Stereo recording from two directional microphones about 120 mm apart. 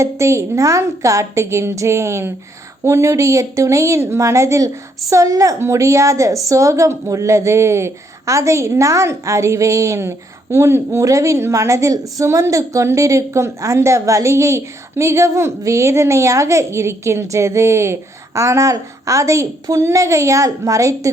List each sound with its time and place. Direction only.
0.0 s a woman's voice: 25° right (ahead or behind)